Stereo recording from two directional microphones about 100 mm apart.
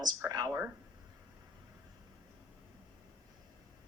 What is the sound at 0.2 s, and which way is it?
Speech, 40° right (ahead or behind).